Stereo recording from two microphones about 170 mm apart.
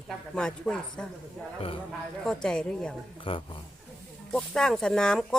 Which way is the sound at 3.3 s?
30° left (ahead or behind).